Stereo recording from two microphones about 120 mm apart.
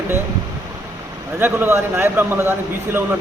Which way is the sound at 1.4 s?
15° right (ahead or behind).